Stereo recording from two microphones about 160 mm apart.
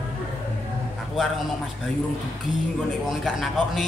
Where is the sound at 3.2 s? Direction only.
Centre (ahead or behind).